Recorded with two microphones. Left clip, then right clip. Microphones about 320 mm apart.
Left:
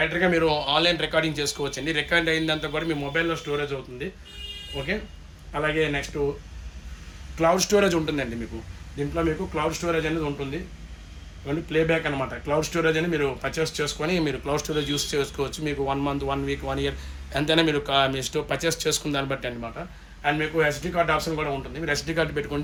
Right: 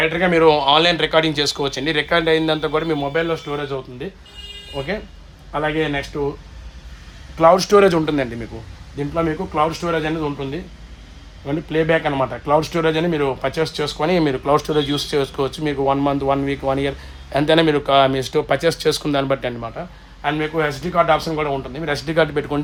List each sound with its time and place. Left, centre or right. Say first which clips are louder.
0.2 s speech: right 10 dB; centre
5.5 s speech: right 4 dB; centre
7.3 s speech: right 8 dB; centre
11.4 s speech: right 5 dB; centre